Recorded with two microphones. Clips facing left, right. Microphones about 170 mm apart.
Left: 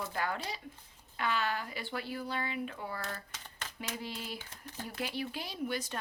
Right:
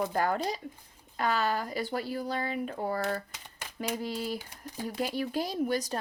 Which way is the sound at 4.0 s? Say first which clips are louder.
Right 8 dB; 40° right (ahead or behind).